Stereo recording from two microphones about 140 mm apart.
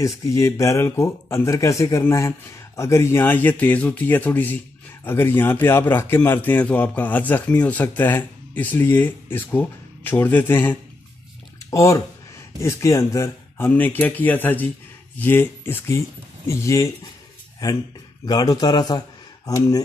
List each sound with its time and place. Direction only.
0.0 s a man's voice: 20° left (ahead or behind)